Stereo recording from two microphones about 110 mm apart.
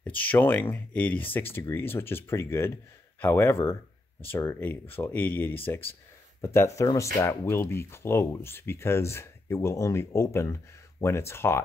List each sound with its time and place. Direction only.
0.0 s speech: 15° left (ahead or behind)